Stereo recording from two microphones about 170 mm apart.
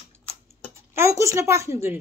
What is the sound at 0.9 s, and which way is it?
A woman's voice, 15° right (ahead or behind).